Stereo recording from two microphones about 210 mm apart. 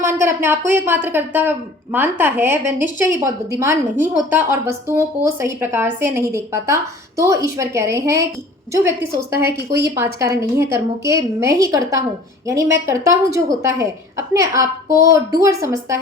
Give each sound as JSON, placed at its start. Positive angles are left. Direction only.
{"t": 0.0, "sound": "a woman's voice", "side_deg": -10}
{"t": 9.3, "sound": "a woman's voice", "side_deg": -15}
{"t": 9.6, "sound": "speech", "side_deg": -50}
{"t": 9.9, "sound": "a woman's voice", "side_deg": -15}